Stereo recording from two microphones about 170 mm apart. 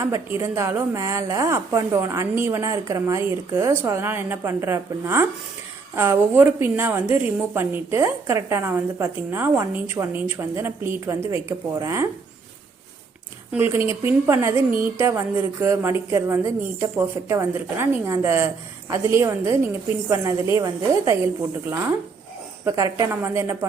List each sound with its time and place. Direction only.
0.0 s a woman's voice: 15° right (ahead or behind)
13.5 s a woman's voice: 15° right (ahead or behind)
22.6 s a woman's voice: 20° right (ahead or behind)